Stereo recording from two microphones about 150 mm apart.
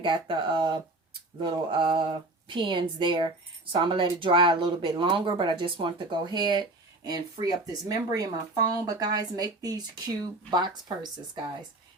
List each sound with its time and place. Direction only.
0.0 s speech: 35° right (ahead or behind)